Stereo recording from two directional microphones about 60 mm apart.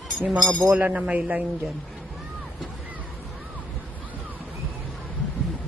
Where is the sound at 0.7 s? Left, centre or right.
Right.